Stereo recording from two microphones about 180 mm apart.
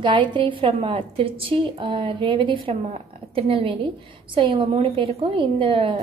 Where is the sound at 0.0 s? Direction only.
25° right (ahead or behind).